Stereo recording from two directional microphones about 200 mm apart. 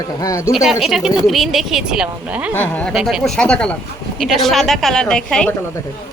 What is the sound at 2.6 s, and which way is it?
Speech, 5° left (ahead or behind).